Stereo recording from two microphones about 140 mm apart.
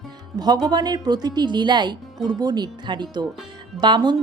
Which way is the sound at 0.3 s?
30° right (ahead or behind).